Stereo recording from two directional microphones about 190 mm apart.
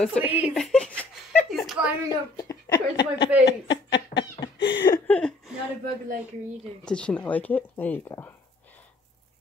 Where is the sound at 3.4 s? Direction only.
65° left (ahead or behind).